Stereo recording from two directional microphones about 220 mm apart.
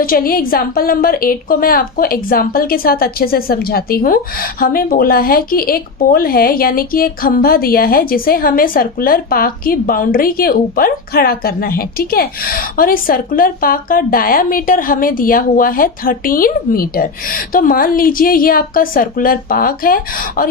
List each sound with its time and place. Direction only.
0.0 s a woman's voice: 40° left (ahead or behind)